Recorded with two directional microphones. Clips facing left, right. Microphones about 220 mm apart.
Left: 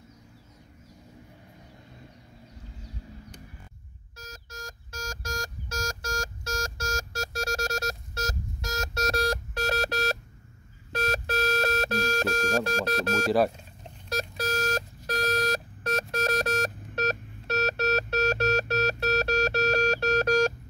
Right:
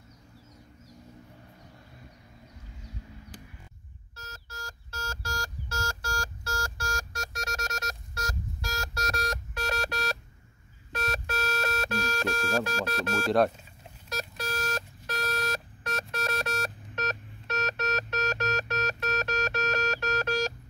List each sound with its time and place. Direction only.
4.2 s telephone dialing: 15° left (ahead or behind); by 10.1 s 40° left (ahead or behind)
10.9 s a sound: 40° left (ahead or behind)
14.0 s alarm clock: 35° left (ahead or behind)